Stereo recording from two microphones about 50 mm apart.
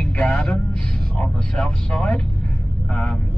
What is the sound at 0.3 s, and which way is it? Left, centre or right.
Music, centre.